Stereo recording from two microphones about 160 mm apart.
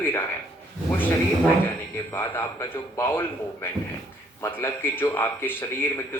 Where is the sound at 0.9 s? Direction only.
10° left (ahead or behind).